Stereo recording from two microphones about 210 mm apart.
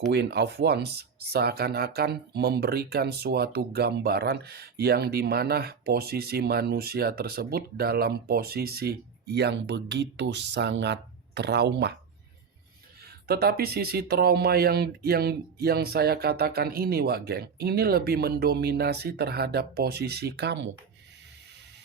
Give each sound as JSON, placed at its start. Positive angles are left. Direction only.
{"t": 0.1, "sound": "speech", "side_deg": -50}
{"t": 13.2, "sound": "speech", "side_deg": -50}